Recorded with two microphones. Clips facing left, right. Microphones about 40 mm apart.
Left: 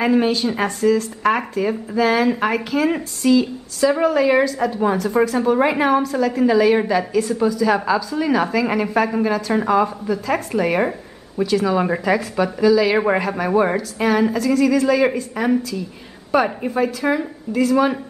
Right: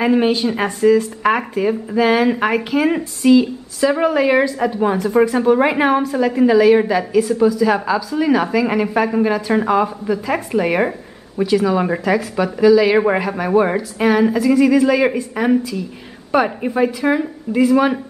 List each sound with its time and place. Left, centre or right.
0.0 s a woman's voice: centre